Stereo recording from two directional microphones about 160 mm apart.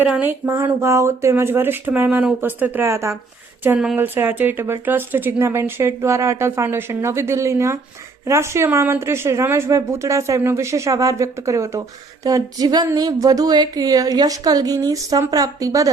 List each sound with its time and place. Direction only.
0.1 s speech: 10° right (ahead or behind)